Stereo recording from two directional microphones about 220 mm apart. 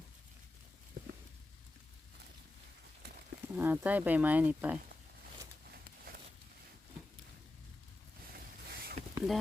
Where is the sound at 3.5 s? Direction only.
10° right (ahead or behind).